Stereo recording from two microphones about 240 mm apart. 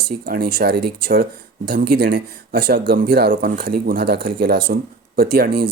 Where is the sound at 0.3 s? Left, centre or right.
Right.